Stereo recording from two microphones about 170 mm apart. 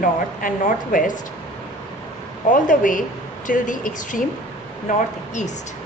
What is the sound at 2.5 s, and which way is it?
A woman's voice, 50° left (ahead or behind).